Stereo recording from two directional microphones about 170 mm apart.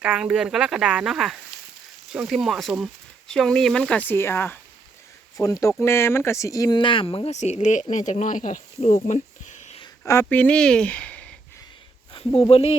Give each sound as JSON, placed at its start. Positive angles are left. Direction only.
{"t": 0.0, "sound": "speech", "side_deg": -5}
{"t": 10.0, "sound": "speech", "side_deg": 15}
{"t": 12.1, "sound": "speech", "side_deg": 35}